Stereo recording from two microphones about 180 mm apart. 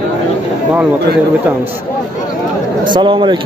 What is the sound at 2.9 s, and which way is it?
Speech, 25° right (ahead or behind).